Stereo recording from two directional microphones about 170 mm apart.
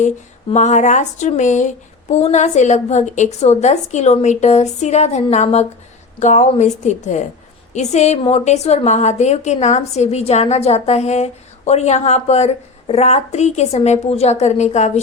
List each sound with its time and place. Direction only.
0.5 s a woman's voice: 45° left (ahead or behind)